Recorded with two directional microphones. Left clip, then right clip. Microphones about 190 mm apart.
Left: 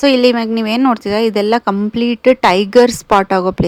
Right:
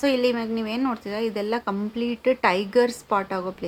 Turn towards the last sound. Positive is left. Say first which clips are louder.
# left 13 dB
turn(degrees=45)  # may be behind; listen again after turning